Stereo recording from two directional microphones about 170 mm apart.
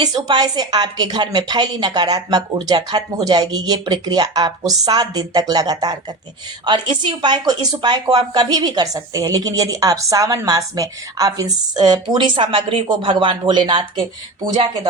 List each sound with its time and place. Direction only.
0.0 s speech: 25° right (ahead or behind)